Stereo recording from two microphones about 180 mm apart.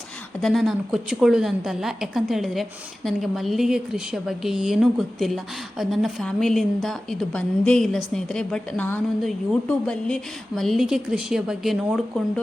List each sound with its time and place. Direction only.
0.4 s a woman's voice: centre (ahead or behind)